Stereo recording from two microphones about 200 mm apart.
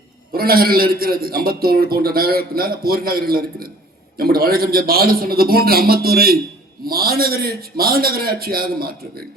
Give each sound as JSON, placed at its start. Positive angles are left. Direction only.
{"t": 0.3, "sound": "a man's voice", "side_deg": -50}